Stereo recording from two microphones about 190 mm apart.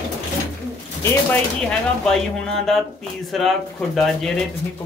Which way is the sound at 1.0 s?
10° left (ahead or behind).